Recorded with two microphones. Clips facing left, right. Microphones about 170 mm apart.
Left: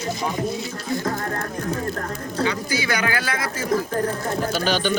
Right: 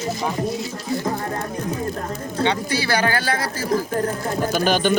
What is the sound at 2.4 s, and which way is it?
Speech, 30° right (ahead or behind).